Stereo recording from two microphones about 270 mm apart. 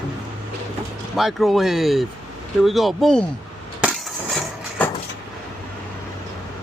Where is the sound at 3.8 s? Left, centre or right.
Centre.